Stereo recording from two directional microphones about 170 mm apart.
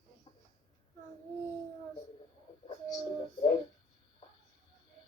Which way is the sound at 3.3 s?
30° left (ahead or behind).